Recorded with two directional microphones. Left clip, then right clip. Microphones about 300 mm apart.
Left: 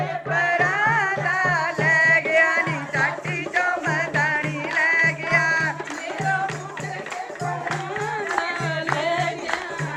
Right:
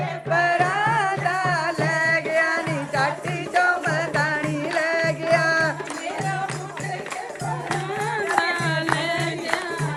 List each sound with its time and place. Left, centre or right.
0.3 s music: centre
3.5 s music: centre
8.0 s music: right